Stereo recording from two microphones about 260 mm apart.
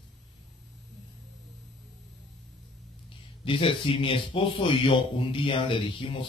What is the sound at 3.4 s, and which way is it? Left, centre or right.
Speech, centre.